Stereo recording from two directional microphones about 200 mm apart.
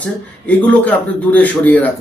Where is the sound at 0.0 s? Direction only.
5° left (ahead or behind).